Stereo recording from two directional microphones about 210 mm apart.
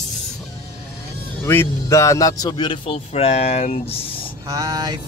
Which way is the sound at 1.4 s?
10° left (ahead or behind).